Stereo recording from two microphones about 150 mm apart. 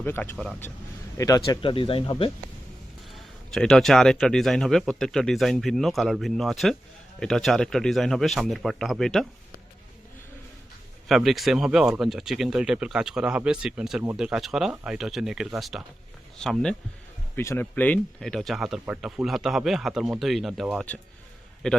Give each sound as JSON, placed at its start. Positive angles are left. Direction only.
{"t": 0.0, "sound": "a man's voice", "side_deg": 15}
{"t": 1.6, "sound": "speech", "side_deg": 35}
{"t": 3.1, "sound": "speech", "side_deg": 5}
{"t": 11.1, "sound": "speech", "side_deg": 0}
{"t": 17.3, "sound": "speech", "side_deg": 15}